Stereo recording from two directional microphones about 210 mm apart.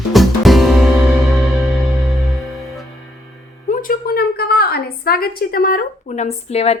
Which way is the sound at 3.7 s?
40° left (ahead or behind).